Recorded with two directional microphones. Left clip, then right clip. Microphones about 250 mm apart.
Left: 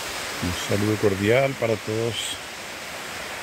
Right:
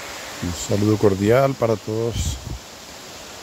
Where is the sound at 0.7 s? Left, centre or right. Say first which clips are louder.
Right 5 dB; centre.